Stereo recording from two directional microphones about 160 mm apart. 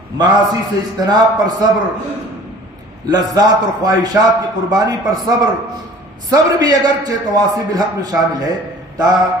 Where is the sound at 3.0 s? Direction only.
25° right (ahead or behind).